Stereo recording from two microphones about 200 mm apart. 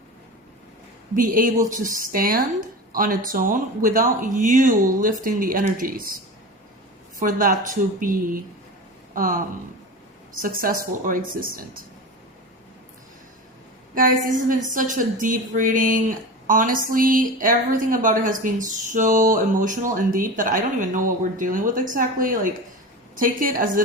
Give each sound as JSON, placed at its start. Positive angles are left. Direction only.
{"t": 1.1, "sound": "speech", "side_deg": -40}
{"t": 7.2, "sound": "speech", "side_deg": -45}
{"t": 10.4, "sound": "speech", "side_deg": -45}
{"t": 13.9, "sound": "speech", "side_deg": -45}